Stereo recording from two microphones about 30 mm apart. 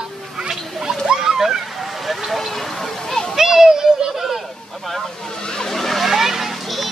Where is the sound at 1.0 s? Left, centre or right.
Right.